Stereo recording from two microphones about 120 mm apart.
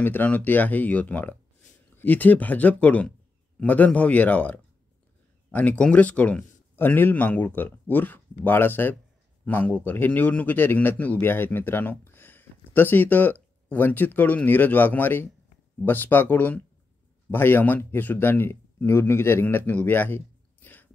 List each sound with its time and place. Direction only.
0.0 s a man's voice: 15° left (ahead or behind)